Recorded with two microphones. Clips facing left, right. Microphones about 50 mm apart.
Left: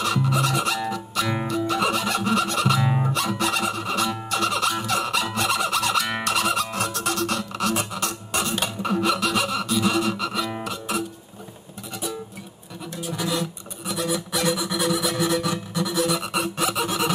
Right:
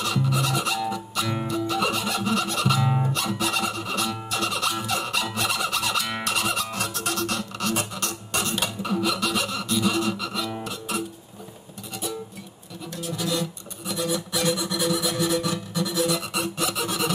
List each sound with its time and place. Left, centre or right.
0.0 s music: centre
2.8 s music: centre
3.1 s music: centre
10.6 s guitar: centre
12.9 s a sound: centre